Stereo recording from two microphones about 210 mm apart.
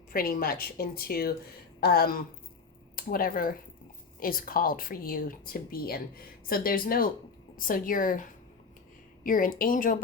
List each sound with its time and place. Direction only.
0.1 s speech: 45° left (ahead or behind)